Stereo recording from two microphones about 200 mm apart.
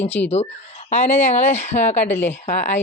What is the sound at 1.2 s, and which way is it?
Speech, 35° left (ahead or behind).